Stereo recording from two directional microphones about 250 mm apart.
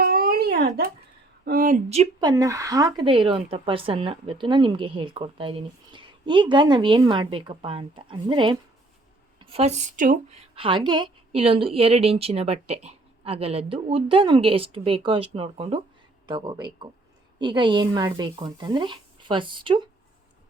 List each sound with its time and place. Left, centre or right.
0.0 s a sound: right
1.5 s speech: right
2.3 s a woman's voice: centre